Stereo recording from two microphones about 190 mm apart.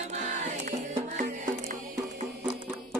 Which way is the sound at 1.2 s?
40° right (ahead or behind).